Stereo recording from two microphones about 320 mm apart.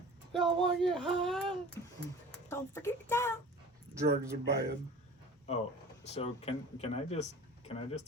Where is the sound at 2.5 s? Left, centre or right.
Centre.